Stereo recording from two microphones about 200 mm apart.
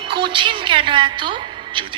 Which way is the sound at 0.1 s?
25° right (ahead or behind).